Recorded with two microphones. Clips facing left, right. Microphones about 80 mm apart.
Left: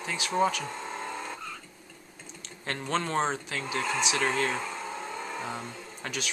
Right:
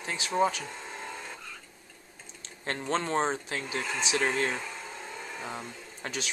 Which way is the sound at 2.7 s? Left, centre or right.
Right.